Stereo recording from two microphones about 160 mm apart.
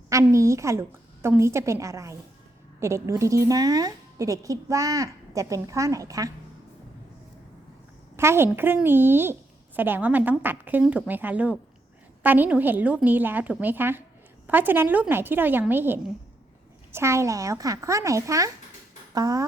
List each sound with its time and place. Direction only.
0.1 s speech: 20° right (ahead or behind)
8.1 s a woman's voice: 15° right (ahead or behind)